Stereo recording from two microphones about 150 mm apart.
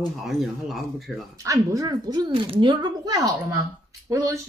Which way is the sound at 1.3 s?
20° right (ahead or behind).